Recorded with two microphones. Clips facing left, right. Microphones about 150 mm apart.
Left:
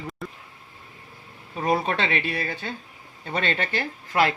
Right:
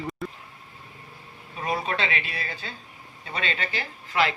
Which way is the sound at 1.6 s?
45° left (ahead or behind).